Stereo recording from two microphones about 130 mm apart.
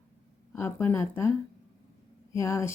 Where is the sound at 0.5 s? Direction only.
15° left (ahead or behind).